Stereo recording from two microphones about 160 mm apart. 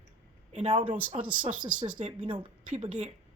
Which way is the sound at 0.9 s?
10° right (ahead or behind).